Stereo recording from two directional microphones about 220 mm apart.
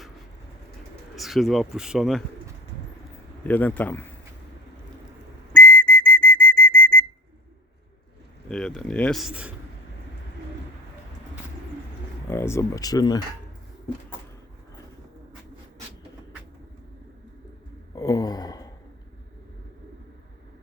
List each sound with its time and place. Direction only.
1.1 s speech: centre (ahead or behind)
3.4 s speech: 10° left (ahead or behind)
5.5 s whistle: 5° left (ahead or behind)
8.4 s speech: 5° left (ahead or behind)
12.3 s speech: 10° left (ahead or behind)
17.9 s a sound: 15° left (ahead or behind)